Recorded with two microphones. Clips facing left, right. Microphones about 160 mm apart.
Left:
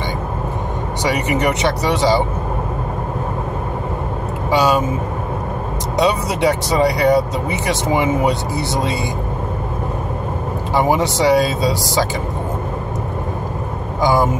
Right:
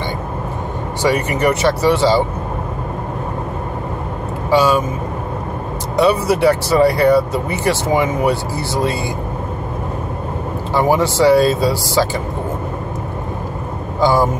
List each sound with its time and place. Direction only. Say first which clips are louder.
1.1 s speech: right 2 dB; 15° left (ahead or behind)
4.5 s speech: right 2 dB; 15° left (ahead or behind)
5.9 s speech: right 3 dB; 20° left (ahead or behind)
10.7 s speech: right 1 dB; 15° left (ahead or behind)
14.0 s speech: right 1 dB; 15° left (ahead or behind)